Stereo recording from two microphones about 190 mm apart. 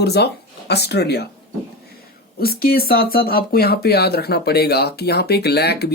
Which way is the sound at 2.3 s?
55° left (ahead or behind).